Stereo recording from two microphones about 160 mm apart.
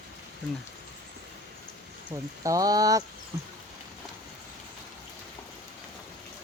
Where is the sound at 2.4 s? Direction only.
20° right (ahead or behind).